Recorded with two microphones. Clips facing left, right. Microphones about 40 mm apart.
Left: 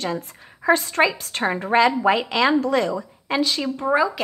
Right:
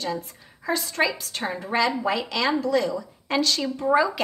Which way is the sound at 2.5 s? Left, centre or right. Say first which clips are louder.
Left 3 dB; left.